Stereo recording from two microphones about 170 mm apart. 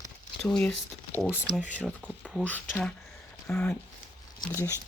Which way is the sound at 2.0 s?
5° right (ahead or behind).